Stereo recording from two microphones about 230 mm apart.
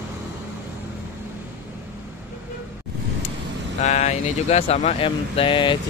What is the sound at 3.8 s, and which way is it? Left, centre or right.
Speech, left.